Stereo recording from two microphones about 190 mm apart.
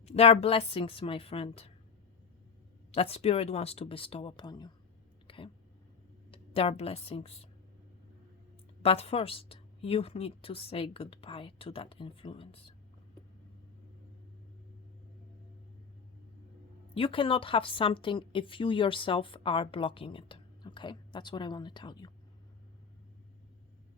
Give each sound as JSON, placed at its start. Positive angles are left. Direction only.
{"t": 0.0, "sound": "speech", "side_deg": 35}
{"t": 2.9, "sound": "speech", "side_deg": 30}
{"t": 5.3, "sound": "a sound", "side_deg": 25}
{"t": 6.3, "sound": "a woman's voice", "side_deg": 30}
{"t": 8.8, "sound": "speech", "side_deg": 30}
{"t": 16.9, "sound": "speech", "side_deg": 30}